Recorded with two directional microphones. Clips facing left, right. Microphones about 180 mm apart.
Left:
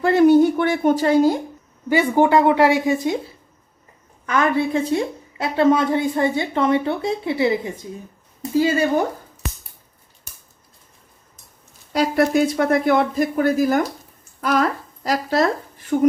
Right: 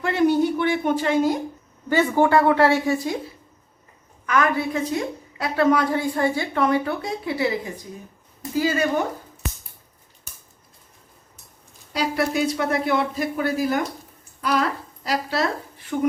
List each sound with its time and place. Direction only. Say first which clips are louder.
0.0 s speech: left 6 dB; 45° left (ahead or behind)
1.9 s a woman's voice: left 2 dB; 15° left (ahead or behind)
4.3 s a woman's voice: left 3 dB; 25° left (ahead or behind)
11.9 s speech: left 5 dB; 50° left (ahead or behind)
15.0 s speech: left 5 dB; 45° left (ahead or behind)